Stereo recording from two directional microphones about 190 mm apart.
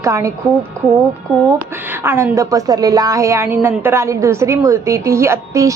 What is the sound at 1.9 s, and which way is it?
A woman's voice, 10° right (ahead or behind).